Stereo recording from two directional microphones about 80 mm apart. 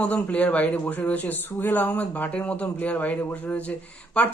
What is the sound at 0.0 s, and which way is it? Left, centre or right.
Speech, centre.